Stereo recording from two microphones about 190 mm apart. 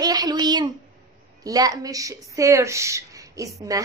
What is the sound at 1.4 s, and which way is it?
A woman's voice, 20° right (ahead or behind).